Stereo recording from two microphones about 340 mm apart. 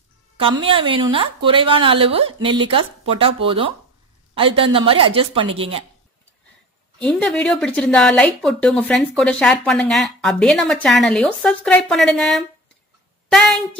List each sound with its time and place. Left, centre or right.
0.6 s speech: centre
7.0 s speech: centre